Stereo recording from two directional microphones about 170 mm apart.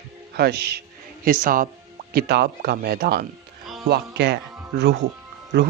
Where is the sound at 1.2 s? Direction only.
55° right (ahead or behind).